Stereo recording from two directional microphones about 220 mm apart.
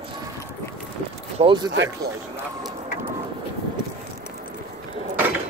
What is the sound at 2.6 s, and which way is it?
Vehicle, 20° right (ahead or behind).